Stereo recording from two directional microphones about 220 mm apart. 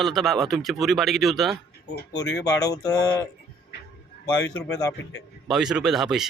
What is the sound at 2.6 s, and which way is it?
Speech, 15° left (ahead or behind).